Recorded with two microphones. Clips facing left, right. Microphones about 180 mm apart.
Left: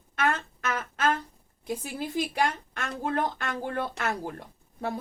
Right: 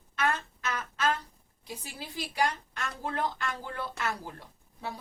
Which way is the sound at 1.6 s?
50° left (ahead or behind).